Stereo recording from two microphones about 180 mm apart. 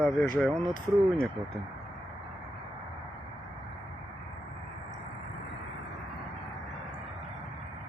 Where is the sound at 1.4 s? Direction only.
30° right (ahead or behind).